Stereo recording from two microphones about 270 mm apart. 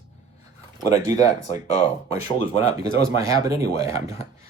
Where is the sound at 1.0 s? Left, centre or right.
Left.